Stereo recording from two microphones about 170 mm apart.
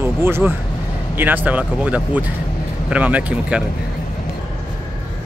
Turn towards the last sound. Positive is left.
turn(degrees=-5)  # may be behind; listen again after turning